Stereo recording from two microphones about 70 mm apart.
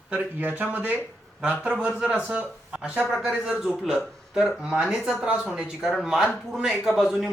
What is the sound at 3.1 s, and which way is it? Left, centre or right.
A man's voice, centre.